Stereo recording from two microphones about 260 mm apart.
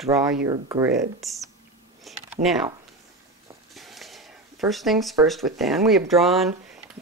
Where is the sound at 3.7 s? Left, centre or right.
Centre.